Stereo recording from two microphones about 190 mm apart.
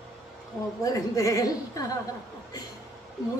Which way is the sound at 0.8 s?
20° left (ahead or behind).